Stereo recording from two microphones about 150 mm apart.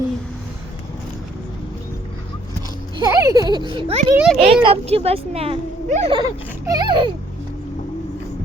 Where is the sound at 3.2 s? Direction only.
25° right (ahead or behind).